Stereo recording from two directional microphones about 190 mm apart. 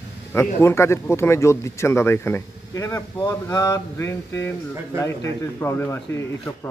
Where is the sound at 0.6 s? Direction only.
15° left (ahead or behind).